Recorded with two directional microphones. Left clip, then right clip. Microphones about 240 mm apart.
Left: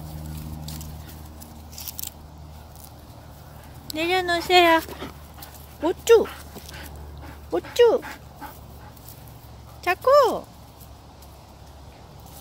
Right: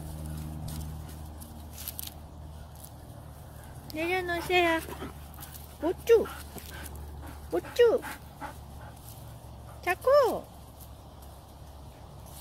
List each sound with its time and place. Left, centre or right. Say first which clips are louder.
1.8 s biting: left 6 dB; centre
3.8 s speech: left 7 dB; centre
7.7 s speech: left 6 dB; centre
8.0 s dog: left 3 dB; centre
9.8 s speech: left 6 dB; centre